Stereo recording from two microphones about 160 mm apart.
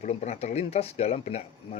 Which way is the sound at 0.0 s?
45° left (ahead or behind).